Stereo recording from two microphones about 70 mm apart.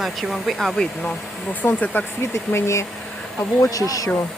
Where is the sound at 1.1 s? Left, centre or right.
Left.